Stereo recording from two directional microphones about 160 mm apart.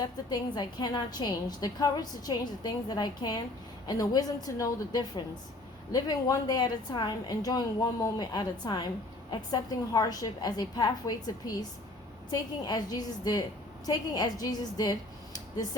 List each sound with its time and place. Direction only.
0.0 s a woman's voice: 25° left (ahead or behind)